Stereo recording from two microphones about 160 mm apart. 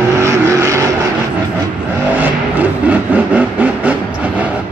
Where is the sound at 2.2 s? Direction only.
10° right (ahead or behind).